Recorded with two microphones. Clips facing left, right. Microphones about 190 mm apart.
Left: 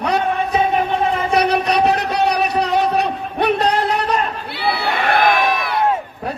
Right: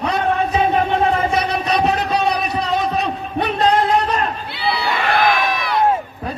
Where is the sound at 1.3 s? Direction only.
65° left (ahead or behind).